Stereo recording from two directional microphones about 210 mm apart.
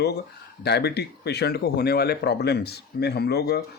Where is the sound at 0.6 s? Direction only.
50° left (ahead or behind).